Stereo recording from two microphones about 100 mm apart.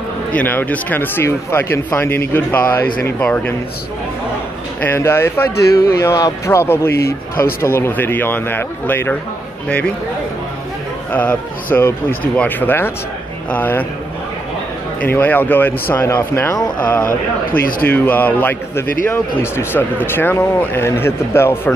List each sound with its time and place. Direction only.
0.3 s a man's voice: 15° left (ahead or behind)
4.8 s a man's voice: 25° left (ahead or behind)
6.1 s a man's voice: 35° left (ahead or behind)
11.1 s a man's voice: 15° left (ahead or behind)
15.0 s a man's voice: 15° left (ahead or behind)